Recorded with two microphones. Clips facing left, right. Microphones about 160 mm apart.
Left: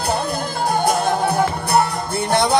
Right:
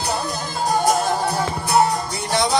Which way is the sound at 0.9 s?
55° left (ahead or behind).